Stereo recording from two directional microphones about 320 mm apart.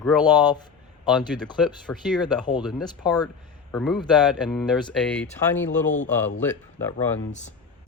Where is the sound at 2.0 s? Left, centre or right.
Centre.